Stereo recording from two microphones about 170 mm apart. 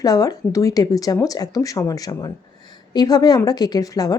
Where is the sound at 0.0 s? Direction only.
20° left (ahead or behind).